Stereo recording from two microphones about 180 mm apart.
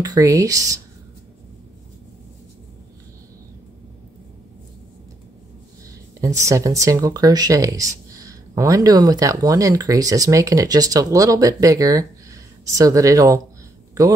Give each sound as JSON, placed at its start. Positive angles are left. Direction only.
{"t": 0.0, "sound": "speech", "side_deg": -20}
{"t": 6.4, "sound": "speech", "side_deg": -15}